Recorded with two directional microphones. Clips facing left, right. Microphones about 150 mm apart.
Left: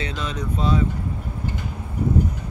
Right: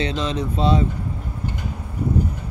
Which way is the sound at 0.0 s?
30° right (ahead or behind).